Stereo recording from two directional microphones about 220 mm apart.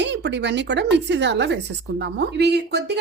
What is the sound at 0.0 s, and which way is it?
Speech, 50° right (ahead or behind).